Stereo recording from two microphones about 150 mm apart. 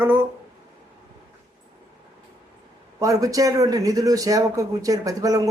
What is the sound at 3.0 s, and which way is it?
Speech, 20° right (ahead or behind).